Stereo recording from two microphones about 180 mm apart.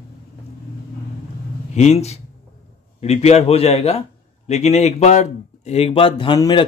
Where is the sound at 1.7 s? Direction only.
40° left (ahead or behind).